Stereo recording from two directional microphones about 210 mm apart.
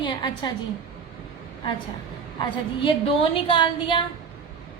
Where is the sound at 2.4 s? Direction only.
25° left (ahead or behind).